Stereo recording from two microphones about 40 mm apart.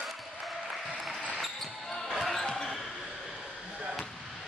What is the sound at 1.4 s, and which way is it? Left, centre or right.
Basketball bounce, centre.